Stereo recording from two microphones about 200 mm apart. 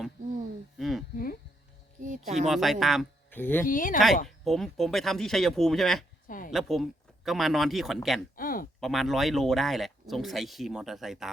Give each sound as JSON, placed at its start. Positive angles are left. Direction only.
{"t": 0.8, "sound": "speech", "side_deg": 0}
{"t": 1.1, "sound": "insect", "side_deg": 45}
{"t": 2.0, "sound": "a sound", "side_deg": -40}
{"t": 2.5, "sound": "speech", "side_deg": 0}
{"t": 3.2, "sound": "speech", "side_deg": 10}
{"t": 3.7, "sound": "speech", "side_deg": 45}
{"t": 4.3, "sound": "speech", "side_deg": 0}
{"t": 6.2, "sound": "a sound", "side_deg": 40}
{"t": 6.5, "sound": "speech", "side_deg": 0}
{"t": 8.4, "sound": "a sound", "side_deg": 45}
{"t": 8.8, "sound": "speech", "side_deg": 0}